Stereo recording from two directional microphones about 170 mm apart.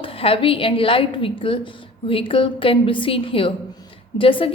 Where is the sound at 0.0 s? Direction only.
35° left (ahead or behind).